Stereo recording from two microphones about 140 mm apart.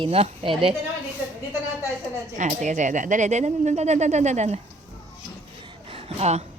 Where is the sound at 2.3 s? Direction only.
60° right (ahead or behind).